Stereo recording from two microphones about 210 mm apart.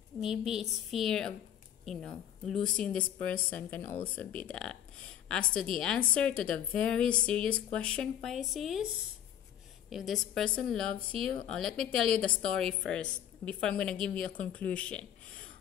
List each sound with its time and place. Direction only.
0.2 s a woman's voice: centre (ahead or behind)
9.8 s a woman's voice: centre (ahead or behind)